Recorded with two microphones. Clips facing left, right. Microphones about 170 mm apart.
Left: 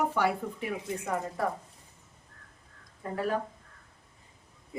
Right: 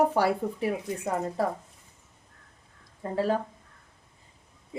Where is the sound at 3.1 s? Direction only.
30° right (ahead or behind).